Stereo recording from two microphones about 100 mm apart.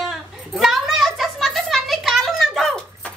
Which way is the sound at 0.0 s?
Centre (ahead or behind).